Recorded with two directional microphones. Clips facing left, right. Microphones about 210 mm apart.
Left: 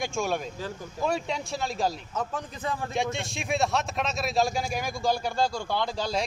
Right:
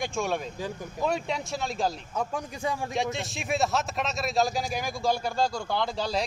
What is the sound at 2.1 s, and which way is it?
Speech, 10° right (ahead or behind).